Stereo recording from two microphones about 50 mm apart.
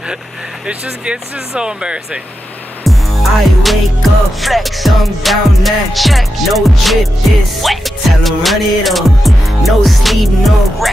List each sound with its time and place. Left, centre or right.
0.8 s speech: centre
2.8 s music: centre